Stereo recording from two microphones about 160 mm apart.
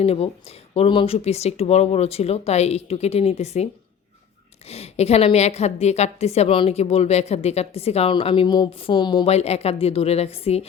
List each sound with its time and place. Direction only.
0.0 s a woman's voice: 40° left (ahead or behind)
4.7 s a woman's voice: 40° left (ahead or behind)
9.3 s a woman's voice: 40° left (ahead or behind)